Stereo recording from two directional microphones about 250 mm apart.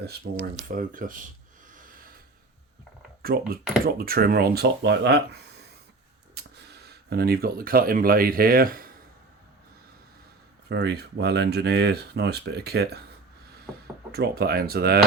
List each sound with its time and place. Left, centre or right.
0.8 s speech: right
3.2 s speech: right
6.8 s speech: right
10.7 s speech: right
14.1 s speech: right